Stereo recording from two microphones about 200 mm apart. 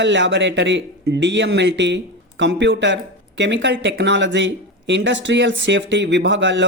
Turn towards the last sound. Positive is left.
turn(degrees=-65)  # may be behind; listen again after turning